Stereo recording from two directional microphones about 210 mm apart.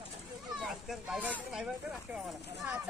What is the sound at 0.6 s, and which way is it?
Speech, centre (ahead or behind).